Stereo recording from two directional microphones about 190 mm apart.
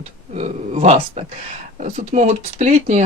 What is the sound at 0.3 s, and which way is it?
Speech, 35° right (ahead or behind).